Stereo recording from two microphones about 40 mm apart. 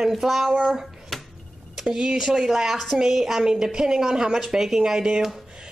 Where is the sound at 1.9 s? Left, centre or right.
Centre.